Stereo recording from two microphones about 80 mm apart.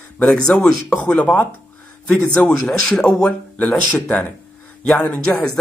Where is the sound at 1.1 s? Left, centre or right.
Centre.